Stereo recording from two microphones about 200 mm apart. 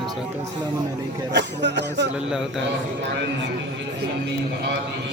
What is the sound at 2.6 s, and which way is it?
A man's voice, 60° right (ahead or behind).